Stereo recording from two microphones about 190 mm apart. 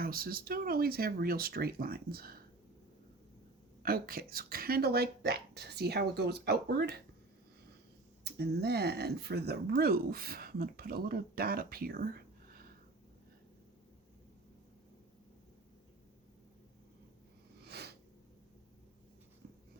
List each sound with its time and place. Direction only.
0.0 s speech: 50° right (ahead or behind)
3.8 s speech: 50° right (ahead or behind)
8.2 s speech: 55° right (ahead or behind)
17.6 s a sound: 60° right (ahead or behind)